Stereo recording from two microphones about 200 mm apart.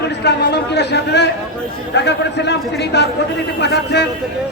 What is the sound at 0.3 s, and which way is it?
A man's voice, 55° left (ahead or behind).